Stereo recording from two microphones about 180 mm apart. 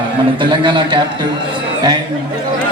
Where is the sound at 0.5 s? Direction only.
25° right (ahead or behind).